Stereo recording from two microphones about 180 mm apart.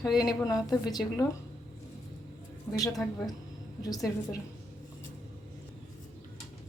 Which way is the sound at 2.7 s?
20° left (ahead or behind).